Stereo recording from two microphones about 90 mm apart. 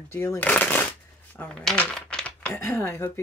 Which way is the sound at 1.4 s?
5° left (ahead or behind).